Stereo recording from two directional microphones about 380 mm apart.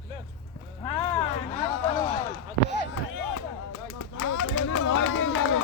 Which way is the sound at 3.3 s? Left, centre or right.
Left.